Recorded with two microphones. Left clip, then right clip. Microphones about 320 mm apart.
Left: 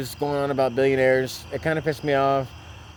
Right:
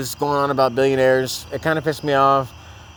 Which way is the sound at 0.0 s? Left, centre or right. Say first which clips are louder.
Right 5 dB; right.